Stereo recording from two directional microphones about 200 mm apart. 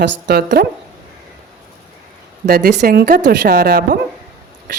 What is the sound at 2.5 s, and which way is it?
A woman's voice, 55° right (ahead or behind).